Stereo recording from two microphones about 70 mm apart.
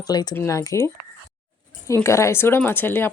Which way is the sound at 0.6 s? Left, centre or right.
Left.